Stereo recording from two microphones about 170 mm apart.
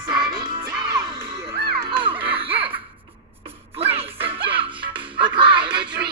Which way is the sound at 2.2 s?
35° right (ahead or behind).